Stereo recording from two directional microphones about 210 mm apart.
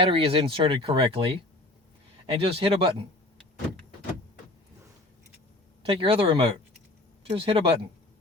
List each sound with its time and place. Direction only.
0.0 s speech: 25° right (ahead or behind)
2.3 s speech: 25° right (ahead or behind)
5.8 s speech: 25° right (ahead or behind)